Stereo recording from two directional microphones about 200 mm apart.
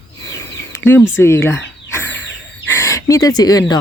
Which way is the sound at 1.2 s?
15° left (ahead or behind).